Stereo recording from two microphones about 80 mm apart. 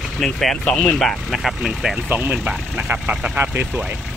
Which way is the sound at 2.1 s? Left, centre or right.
Right.